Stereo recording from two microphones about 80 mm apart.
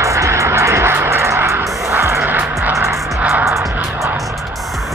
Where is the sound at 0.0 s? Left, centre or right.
Right; by 3.4 s centre.